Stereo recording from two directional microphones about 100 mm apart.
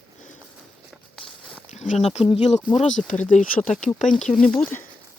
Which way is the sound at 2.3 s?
90° left.